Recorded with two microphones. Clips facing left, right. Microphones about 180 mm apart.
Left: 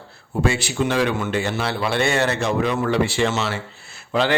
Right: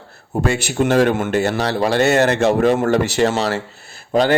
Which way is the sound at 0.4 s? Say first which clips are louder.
Right 3 dB; 45° right (ahead or behind).